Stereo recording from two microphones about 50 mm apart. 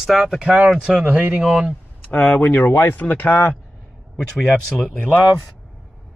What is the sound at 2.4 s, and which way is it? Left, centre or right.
Speech, left.